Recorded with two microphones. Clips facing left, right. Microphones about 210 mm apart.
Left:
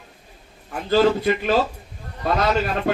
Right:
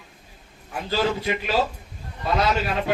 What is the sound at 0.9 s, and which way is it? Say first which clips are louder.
Speech: left 7 dB; 50° left (ahead or behind).